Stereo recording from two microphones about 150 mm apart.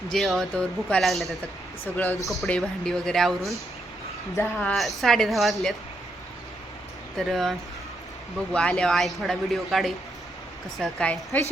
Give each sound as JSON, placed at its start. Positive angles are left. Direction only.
{"t": 0.1, "sound": "a woman's voice", "side_deg": 0}
{"t": 7.2, "sound": "a woman's voice", "side_deg": 0}
{"t": 8.5, "sound": "a woman's voice", "side_deg": 5}